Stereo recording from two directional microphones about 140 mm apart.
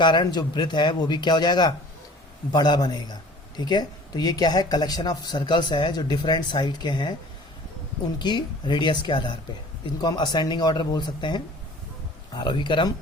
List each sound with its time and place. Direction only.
0.0 s a man's voice: 30° left (ahead or behind)
8.2 s a man's voice: 35° left (ahead or behind)